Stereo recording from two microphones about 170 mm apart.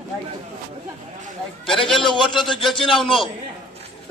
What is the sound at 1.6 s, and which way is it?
Speech, centre (ahead or behind).